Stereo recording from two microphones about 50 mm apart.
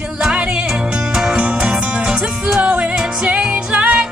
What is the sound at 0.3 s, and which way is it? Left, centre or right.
Music, right.